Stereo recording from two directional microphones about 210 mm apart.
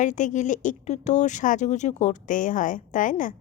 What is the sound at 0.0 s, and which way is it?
Speech, 35° left (ahead or behind).